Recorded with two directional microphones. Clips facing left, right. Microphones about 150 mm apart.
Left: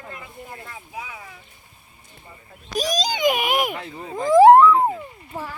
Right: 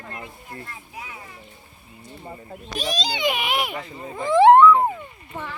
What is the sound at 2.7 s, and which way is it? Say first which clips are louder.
A child's voice: left 4 dB; 40° left (ahead or behind).